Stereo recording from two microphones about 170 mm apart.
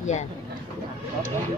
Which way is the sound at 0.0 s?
45° left (ahead or behind).